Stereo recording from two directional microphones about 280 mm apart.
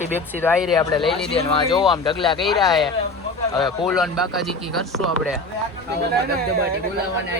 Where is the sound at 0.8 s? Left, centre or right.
Centre.